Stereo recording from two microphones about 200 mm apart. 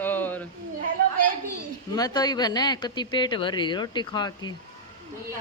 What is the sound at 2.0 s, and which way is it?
Speech, 20° left (ahead or behind).